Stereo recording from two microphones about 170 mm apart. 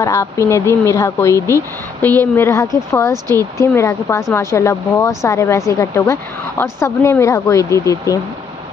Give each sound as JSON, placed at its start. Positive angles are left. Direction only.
{"t": 0.0, "sound": "speech", "side_deg": 15}